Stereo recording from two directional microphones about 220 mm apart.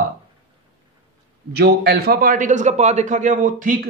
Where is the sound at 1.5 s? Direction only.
45° right (ahead or behind).